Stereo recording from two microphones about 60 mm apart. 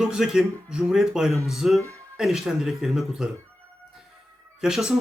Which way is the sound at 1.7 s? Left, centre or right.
Right.